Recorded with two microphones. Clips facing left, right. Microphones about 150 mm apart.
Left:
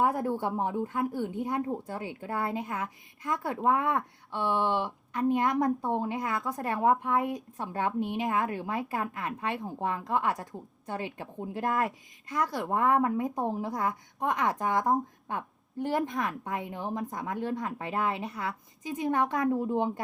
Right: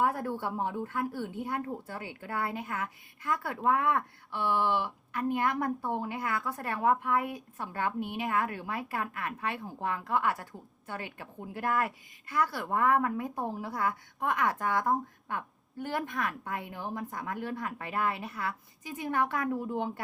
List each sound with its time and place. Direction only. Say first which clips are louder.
0.0 s speech: left 3 dB; 15° left (ahead or behind)